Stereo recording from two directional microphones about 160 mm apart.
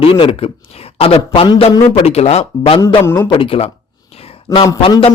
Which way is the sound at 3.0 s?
15° left (ahead or behind).